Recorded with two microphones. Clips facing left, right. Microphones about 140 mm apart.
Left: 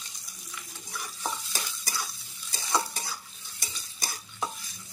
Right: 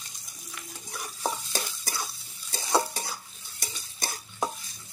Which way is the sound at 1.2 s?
40° right (ahead or behind).